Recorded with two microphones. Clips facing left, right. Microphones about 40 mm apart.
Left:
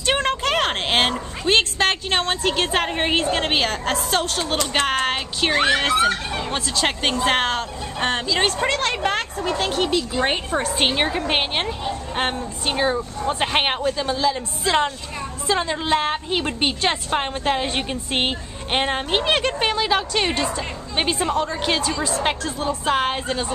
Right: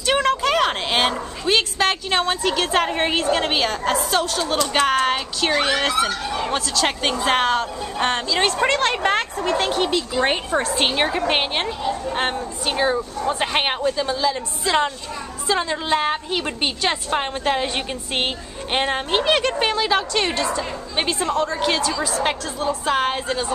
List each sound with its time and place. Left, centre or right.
0.0 s a sound: left
1.6 s speech: left
2.6 s speech: centre
4.1 s a woman's voice: left
4.4 s a woman's voice: left
7.4 s a woman's voice: centre